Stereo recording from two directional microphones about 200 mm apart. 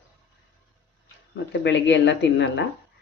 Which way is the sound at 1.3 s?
60° left (ahead or behind).